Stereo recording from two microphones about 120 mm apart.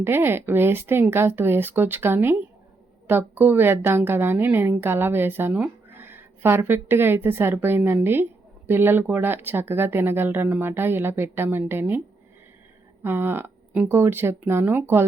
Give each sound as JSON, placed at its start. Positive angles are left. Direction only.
{"t": 0.0, "sound": "a woman's voice", "side_deg": -20}